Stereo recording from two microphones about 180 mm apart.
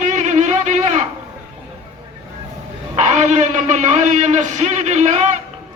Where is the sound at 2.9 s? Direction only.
40° right (ahead or behind).